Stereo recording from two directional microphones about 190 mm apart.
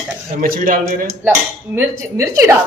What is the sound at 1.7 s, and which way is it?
Speech, 15° right (ahead or behind).